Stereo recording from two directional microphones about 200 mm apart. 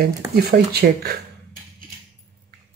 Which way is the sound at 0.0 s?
50° right (ahead or behind).